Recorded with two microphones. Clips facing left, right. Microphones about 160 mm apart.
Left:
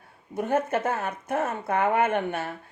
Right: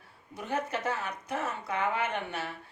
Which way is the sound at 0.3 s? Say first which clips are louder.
Left 8 dB; 50° left (ahead or behind).